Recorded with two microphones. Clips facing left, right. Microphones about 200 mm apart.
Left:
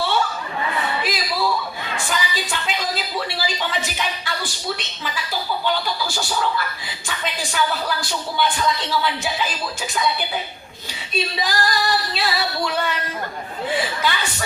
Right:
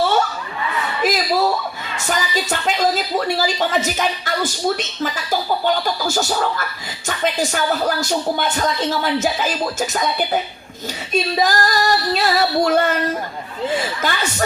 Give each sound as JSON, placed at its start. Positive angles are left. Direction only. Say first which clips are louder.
{"t": 1.0, "sound": "a woman's voice", "louder": "right 6 dB", "side_deg": -45}
{"t": 7.5, "sound": "a woman's voice", "louder": "right 4 dB", "side_deg": -45}
{"t": 14.0, "sound": "a woman's voice", "louder": "right 2 dB", "side_deg": -45}